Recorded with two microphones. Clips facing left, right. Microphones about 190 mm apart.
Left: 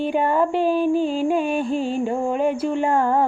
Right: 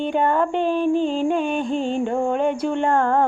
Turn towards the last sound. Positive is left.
turn(degrees=5)  # may be behind; listen again after turning